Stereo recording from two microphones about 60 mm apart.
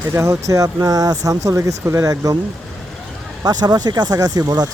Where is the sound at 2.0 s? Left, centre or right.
Right.